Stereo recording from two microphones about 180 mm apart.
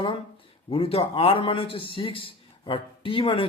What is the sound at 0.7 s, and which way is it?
A man's voice, 30° left (ahead or behind).